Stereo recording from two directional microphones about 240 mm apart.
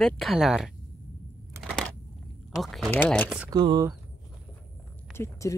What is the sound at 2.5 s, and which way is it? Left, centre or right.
Speech, centre.